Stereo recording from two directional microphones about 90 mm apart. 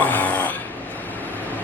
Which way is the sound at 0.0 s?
20° left (ahead or behind).